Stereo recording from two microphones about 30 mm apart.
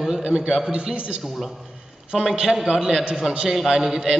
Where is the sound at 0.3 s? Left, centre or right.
Right.